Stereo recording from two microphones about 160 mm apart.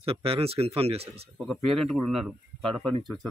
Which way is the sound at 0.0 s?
35° right (ahead or behind).